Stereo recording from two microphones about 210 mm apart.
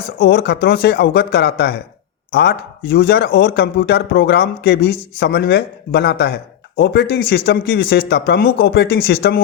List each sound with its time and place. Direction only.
0.2 s speech: 50° left (ahead or behind)